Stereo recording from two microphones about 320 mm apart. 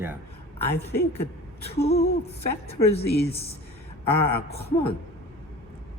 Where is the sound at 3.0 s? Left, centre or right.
Left.